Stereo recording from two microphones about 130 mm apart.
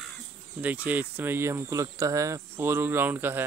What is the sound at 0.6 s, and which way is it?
Speech, 10° right (ahead or behind).